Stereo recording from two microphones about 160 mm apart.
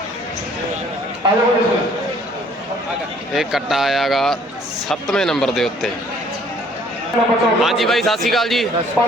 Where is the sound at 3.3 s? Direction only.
Centre (ahead or behind).